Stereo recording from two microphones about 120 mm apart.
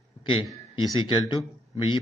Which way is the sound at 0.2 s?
45° left (ahead or behind).